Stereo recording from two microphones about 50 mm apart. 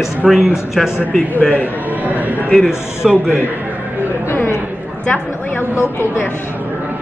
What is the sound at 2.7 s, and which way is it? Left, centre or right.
Speech, left.